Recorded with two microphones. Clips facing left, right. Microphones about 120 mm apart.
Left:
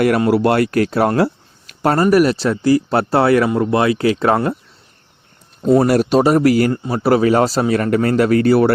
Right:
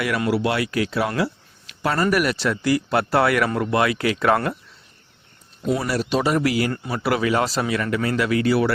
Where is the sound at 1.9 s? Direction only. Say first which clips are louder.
Left 8 dB; 30° left (ahead or behind).